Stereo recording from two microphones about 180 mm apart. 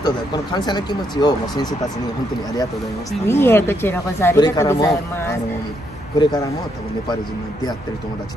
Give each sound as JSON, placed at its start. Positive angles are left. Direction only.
{"t": 0.0, "sound": "speech", "side_deg": 25}
{"t": 3.3, "sound": "speech", "side_deg": 15}